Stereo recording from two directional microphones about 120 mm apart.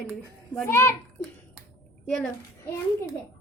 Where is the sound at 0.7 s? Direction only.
20° left (ahead or behind).